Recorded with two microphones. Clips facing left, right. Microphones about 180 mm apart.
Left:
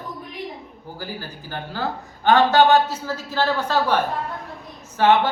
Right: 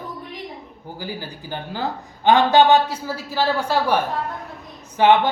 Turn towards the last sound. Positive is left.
turn(degrees=-15)  # may be behind; listen again after turning